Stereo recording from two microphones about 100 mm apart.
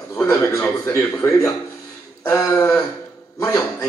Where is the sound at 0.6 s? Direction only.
20° left (ahead or behind).